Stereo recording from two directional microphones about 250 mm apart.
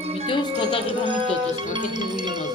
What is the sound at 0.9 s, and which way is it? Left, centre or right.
Music, centre.